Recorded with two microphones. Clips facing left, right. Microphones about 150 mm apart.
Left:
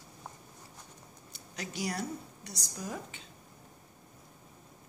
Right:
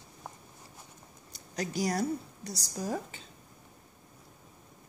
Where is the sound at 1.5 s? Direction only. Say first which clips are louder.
Right 6 dB; 40° right (ahead or behind).